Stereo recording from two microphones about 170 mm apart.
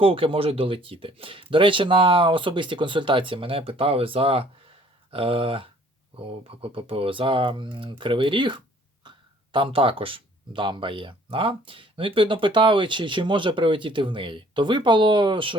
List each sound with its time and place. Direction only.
0.0 s speech: 30° right (ahead or behind)